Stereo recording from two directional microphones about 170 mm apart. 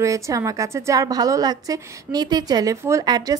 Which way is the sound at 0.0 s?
20° right (ahead or behind).